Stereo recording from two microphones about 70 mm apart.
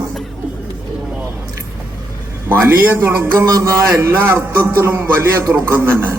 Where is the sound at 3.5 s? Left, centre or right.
Right.